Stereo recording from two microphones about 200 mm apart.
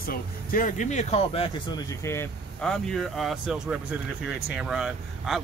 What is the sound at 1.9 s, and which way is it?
Speech, 15° left (ahead or behind).